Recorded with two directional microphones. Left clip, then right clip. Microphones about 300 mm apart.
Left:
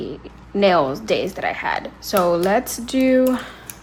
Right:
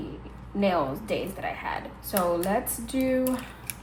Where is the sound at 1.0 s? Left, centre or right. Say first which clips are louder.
Left 9 dB; left.